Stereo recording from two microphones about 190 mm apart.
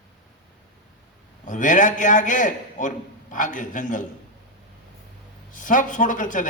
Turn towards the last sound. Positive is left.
turn(degrees=45)  # may be behind; listen again after turning